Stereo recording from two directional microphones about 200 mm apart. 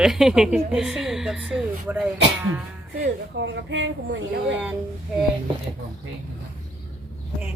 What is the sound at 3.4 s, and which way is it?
Speech, 60° right (ahead or behind).